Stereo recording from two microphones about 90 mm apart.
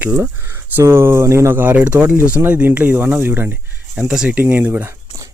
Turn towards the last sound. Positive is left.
turn(degrees=-20)  # may be behind; listen again after turning